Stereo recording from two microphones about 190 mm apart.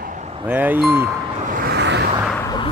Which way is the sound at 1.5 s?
55° right (ahead or behind).